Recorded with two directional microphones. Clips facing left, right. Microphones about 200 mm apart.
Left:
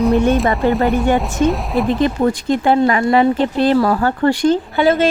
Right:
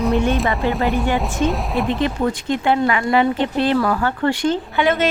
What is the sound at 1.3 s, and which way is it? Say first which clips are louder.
Speech: left 4 dB; centre (ahead or behind).